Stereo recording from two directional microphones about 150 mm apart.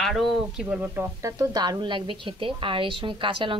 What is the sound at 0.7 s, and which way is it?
A woman's voice, 15° right (ahead or behind).